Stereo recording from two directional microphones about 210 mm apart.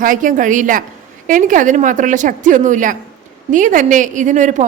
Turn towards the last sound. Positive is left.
turn(degrees=-35)  # may be behind; listen again after turning